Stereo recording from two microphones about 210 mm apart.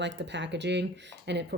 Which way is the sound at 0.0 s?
60° right (ahead or behind).